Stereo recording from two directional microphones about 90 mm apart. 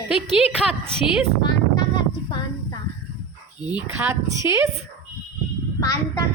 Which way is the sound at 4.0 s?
30° right (ahead or behind).